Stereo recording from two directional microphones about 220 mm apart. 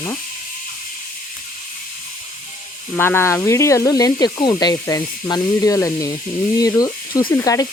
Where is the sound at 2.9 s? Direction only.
10° left (ahead or behind).